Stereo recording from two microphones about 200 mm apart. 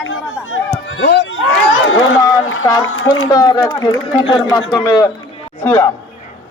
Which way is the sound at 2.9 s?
90° left.